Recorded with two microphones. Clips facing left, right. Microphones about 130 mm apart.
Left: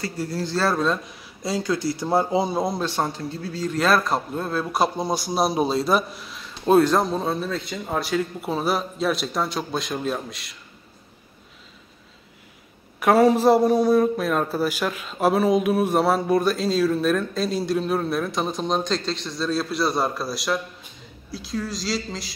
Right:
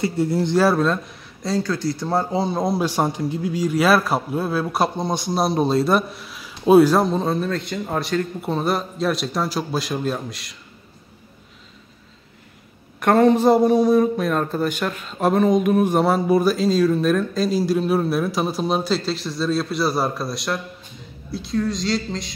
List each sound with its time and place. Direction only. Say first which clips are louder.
0.0 s a man's voice: right 7 dB; 25° right (ahead or behind); by 1.0 s centre (ahead or behind)
1.4 s speech: right 2 dB; 10° left (ahead or behind)
2.8 s a man's voice: right 4 dB; 10° right (ahead or behind)
13.0 s a man's voice: right 1 dB; 5° left (ahead or behind)